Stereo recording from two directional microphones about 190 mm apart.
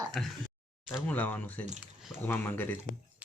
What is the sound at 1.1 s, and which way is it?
Cutlery, 10° left (ahead or behind).